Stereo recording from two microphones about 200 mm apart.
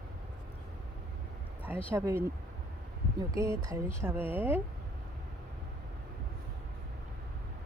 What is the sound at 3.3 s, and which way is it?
Speech, 15° right (ahead or behind).